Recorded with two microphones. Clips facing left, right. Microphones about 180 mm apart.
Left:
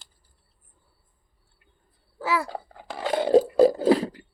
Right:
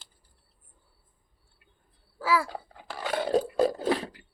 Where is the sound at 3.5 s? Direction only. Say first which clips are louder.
Left 7 dB; 30° left (ahead or behind).